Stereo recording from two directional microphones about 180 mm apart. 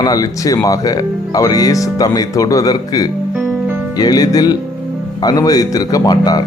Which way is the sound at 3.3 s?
10° right (ahead or behind).